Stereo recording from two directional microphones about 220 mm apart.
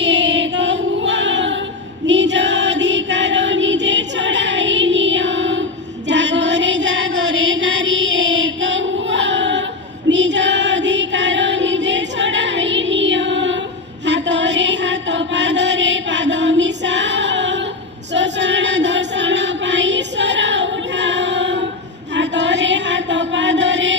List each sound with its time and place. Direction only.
0.0 s choir: 55° right (ahead or behind)
2.0 s music: 55° right (ahead or behind)
14.0 s chant: 55° right (ahead or behind)
18.1 s choir: 55° right (ahead or behind)
22.1 s chant: 55° right (ahead or behind)